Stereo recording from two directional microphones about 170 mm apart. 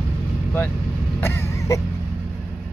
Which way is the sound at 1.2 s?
15° left (ahead or behind).